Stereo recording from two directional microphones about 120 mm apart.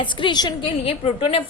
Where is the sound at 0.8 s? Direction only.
50° left (ahead or behind).